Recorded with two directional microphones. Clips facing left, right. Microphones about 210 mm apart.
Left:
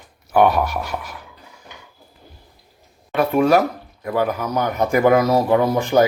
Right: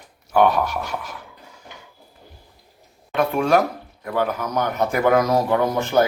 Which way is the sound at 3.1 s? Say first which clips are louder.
Left 3 dB; 5° left (ahead or behind).